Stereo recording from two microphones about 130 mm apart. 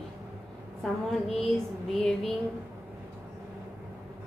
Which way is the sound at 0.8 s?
Centre (ahead or behind).